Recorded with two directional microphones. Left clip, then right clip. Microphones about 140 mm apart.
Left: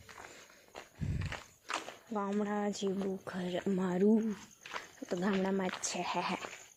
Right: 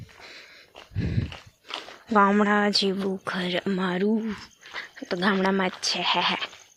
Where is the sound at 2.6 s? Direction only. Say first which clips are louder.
Right 12 dB; 15° right (ahead or behind).